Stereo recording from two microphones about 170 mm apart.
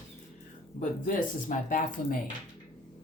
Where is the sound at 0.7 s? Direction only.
50° left (ahead or behind).